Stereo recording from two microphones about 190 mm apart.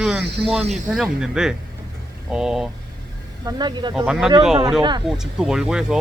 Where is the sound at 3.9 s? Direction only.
5° right (ahead or behind).